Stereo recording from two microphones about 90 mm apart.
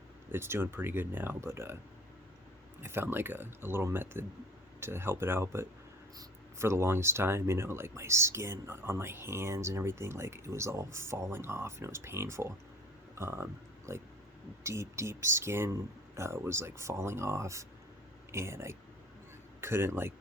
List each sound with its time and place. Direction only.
0.3 s speech: 25° right (ahead or behind)
2.8 s speech: 25° right (ahead or behind)